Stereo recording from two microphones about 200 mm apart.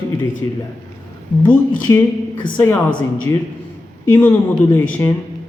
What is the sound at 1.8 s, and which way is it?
Speech, 20° left (ahead or behind).